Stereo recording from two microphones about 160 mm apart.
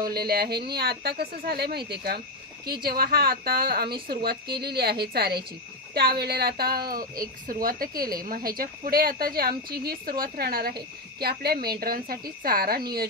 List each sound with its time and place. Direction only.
0.0 s a woman's voice: 75° right (ahead or behind)